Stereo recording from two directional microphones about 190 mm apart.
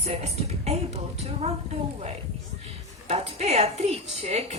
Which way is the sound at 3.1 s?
35° right (ahead or behind).